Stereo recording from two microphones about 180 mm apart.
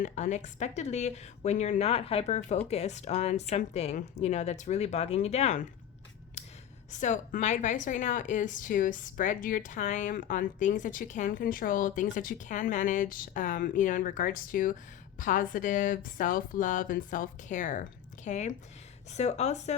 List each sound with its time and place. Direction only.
0.0 s speech: 40° left (ahead or behind)
6.4 s gasp: 40° left (ahead or behind)
6.9 s a woman's voice: 45° left (ahead or behind)